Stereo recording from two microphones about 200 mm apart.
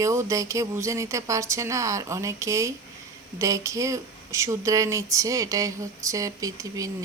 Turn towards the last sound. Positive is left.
turn(degrees=-15)  # may be behind; listen again after turning